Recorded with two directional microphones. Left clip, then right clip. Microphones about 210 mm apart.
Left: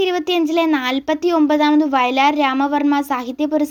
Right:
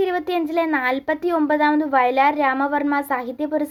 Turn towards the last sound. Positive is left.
turn(degrees=25)  # may be behind; listen again after turning